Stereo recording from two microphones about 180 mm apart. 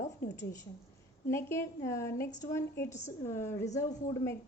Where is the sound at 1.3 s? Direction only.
15° left (ahead or behind).